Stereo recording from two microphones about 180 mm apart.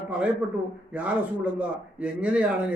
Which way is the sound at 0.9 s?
10° right (ahead or behind).